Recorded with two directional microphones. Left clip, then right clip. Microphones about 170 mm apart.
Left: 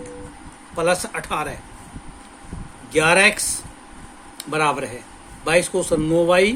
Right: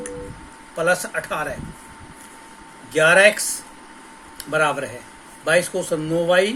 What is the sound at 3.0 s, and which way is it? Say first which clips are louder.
Speech: right 2 dB; 55° left (ahead or behind).